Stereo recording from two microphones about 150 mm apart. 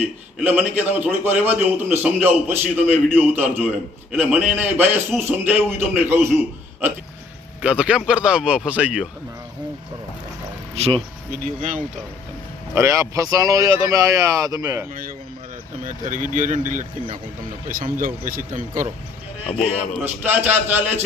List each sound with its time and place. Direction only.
0.0 s a man's voice: 10° right (ahead or behind)
7.6 s a man's voice: 5° right (ahead or behind)
10.8 s speech: 40° right (ahead or behind)
11.3 s speech: 60° right (ahead or behind)
12.7 s speech: 20° right (ahead or behind)
15.8 s speech: 55° right (ahead or behind)
17.9 s speech: 70° right (ahead or behind)
19.5 s a man's voice: 35° left (ahead or behind)
20.1 s a man's voice: 15° right (ahead or behind)